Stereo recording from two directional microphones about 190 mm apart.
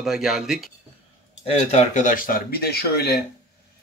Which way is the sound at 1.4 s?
35° left (ahead or behind).